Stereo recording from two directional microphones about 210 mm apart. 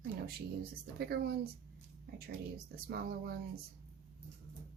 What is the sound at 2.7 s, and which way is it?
Speech, 45° right (ahead or behind).